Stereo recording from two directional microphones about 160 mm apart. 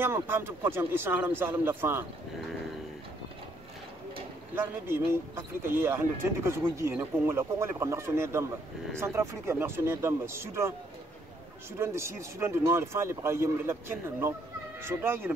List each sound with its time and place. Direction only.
0.0 s speech: 15° right (ahead or behind)
4.6 s speech: 15° right (ahead or behind)
11.8 s speech: 15° right (ahead or behind)